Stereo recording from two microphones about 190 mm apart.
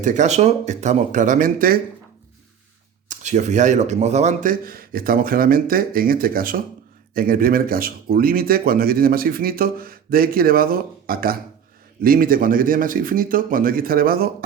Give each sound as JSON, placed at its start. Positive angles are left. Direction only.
{"t": 0.0, "sound": "speech", "side_deg": -40}
{"t": 3.1, "sound": "speech", "side_deg": -40}